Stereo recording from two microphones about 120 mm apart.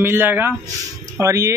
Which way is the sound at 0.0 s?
20° right (ahead or behind).